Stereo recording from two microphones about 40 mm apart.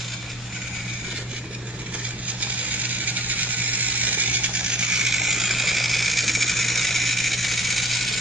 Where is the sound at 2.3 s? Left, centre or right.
Right.